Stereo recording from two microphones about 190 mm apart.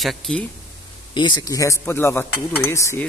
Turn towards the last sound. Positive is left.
turn(degrees=15)  # may be behind; listen again after turning